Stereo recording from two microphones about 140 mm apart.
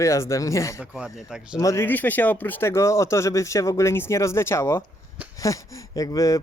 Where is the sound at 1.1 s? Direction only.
5° right (ahead or behind).